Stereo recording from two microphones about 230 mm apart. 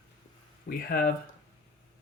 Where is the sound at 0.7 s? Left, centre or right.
Left.